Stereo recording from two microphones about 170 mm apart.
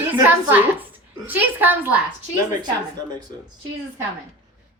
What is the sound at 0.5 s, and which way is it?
A woman's voice, 10° right (ahead or behind).